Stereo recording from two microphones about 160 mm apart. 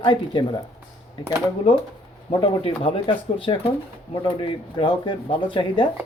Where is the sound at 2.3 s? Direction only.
35° left (ahead or behind).